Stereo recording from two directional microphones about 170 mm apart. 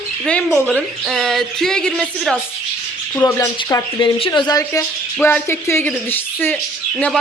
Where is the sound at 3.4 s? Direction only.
15° left (ahead or behind).